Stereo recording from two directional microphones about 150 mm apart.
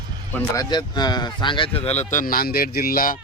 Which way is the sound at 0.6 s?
30° left (ahead or behind).